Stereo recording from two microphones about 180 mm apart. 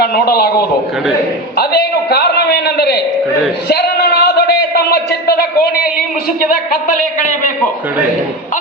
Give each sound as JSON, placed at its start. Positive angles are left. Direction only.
{"t": 0.0, "sound": "a man's voice", "side_deg": 60}
{"t": 1.5, "sound": "a sound", "side_deg": 60}
{"t": 6.7, "sound": "a man's voice", "side_deg": 50}